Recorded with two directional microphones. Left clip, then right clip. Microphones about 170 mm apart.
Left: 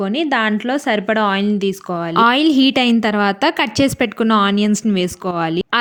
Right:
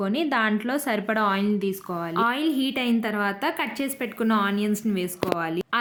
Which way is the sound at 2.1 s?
60° left (ahead or behind).